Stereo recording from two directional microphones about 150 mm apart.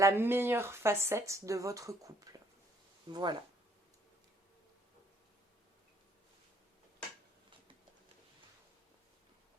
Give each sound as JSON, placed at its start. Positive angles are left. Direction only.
{"t": 0.0, "sound": "speech", "side_deg": -15}